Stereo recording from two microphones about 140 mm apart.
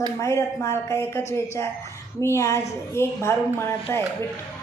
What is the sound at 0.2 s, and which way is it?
A woman's voice, 20° left (ahead or behind).